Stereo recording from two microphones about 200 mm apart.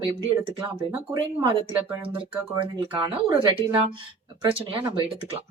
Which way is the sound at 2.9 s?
25° right (ahead or behind).